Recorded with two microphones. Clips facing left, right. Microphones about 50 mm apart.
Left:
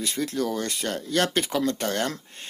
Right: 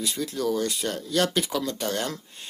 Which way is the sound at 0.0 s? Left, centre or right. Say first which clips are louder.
Left 1 dB; left.